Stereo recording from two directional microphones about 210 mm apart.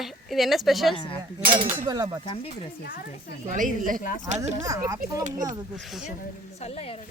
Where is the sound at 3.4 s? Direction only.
40° right (ahead or behind).